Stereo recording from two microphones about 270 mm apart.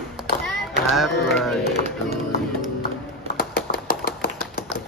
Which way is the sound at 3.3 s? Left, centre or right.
Left.